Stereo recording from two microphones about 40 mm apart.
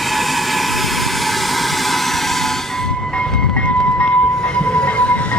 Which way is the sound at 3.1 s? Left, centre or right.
Left.